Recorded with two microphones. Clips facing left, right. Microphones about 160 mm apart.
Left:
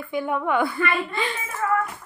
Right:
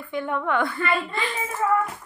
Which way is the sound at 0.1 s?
5° left (ahead or behind).